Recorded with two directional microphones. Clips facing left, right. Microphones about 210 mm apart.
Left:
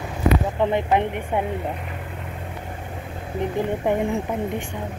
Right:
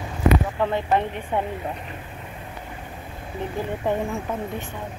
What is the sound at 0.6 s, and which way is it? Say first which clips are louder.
Speech: left 2 dB; 20° left (ahead or behind).